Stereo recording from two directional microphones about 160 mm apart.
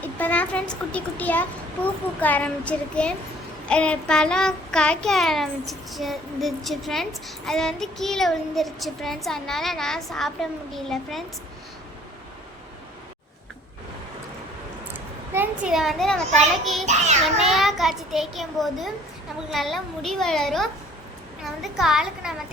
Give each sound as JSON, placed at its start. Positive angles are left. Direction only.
{"t": 0.0, "sound": "a child's voice", "side_deg": 10}
{"t": 15.3, "sound": "a child's voice", "side_deg": -10}
{"t": 15.7, "sound": "a child's voice", "side_deg": 0}
{"t": 16.8, "sound": "a child's voice", "side_deg": -45}
{"t": 17.4, "sound": "a child's voice", "side_deg": 0}